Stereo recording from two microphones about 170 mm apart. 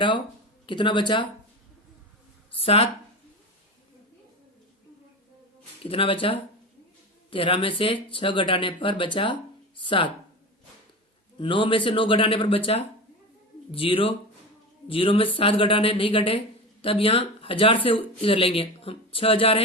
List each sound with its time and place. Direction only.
0.7 s speech: 30° left (ahead or behind)
2.6 s speech: 35° left (ahead or behind)
5.8 s speech: 30° left (ahead or behind)
11.3 s speech: 30° left (ahead or behind)